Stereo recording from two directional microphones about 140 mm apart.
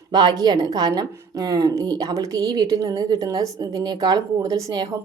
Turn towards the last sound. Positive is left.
turn(degrees=-25)  # may be behind; listen again after turning